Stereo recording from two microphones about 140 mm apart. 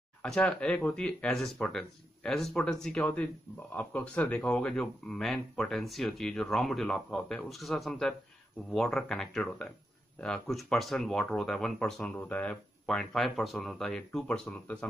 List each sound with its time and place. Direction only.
0.2 s speech: 10° left (ahead or behind)